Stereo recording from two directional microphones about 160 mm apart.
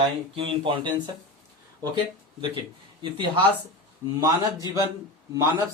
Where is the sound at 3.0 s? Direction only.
30° right (ahead or behind).